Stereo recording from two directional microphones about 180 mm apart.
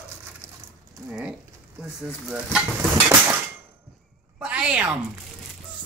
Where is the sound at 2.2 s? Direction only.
5° right (ahead or behind).